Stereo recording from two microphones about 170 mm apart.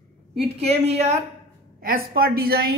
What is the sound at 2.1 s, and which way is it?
Speech, 60° right (ahead or behind).